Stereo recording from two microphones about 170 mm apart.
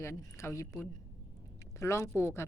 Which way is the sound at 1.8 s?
15° left (ahead or behind).